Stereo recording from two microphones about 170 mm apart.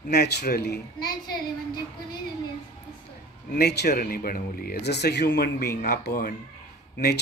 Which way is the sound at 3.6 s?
70° left (ahead or behind).